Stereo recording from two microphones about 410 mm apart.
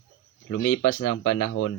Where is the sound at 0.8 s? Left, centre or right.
Left.